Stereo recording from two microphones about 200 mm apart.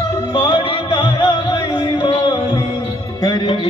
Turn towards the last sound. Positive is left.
turn(degrees=20)  # may be behind; listen again after turning